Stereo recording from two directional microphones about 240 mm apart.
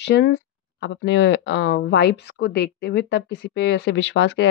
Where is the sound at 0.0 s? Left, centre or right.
Left.